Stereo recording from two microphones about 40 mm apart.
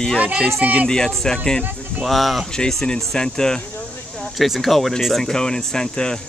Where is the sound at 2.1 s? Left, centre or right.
Centre.